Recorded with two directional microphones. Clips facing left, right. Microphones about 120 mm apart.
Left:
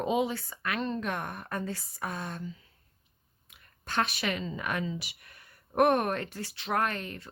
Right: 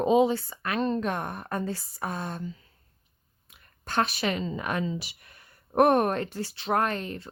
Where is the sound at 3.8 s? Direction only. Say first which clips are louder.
Right 4 dB; 35° right (ahead or behind).